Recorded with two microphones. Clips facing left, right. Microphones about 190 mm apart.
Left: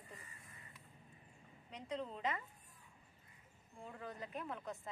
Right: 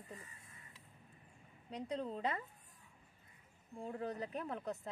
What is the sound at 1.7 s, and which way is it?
Speech, 35° right (ahead or behind).